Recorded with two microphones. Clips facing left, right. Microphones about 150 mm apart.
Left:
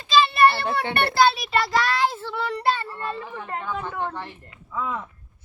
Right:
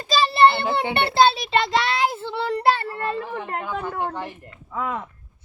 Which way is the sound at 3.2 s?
55° right (ahead or behind).